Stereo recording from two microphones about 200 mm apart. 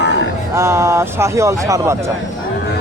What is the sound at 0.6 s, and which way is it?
Speech, 15° right (ahead or behind).